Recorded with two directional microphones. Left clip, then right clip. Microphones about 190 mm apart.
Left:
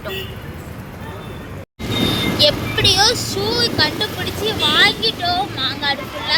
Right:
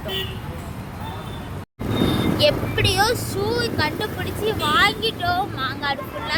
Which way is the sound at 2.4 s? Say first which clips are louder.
Left 5 dB; centre (ahead or behind).